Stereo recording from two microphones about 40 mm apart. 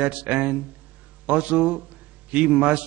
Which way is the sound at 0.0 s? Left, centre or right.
Right.